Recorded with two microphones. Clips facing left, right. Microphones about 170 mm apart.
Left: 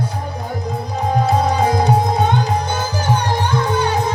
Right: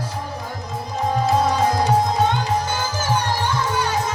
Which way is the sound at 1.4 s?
60° left (ahead or behind).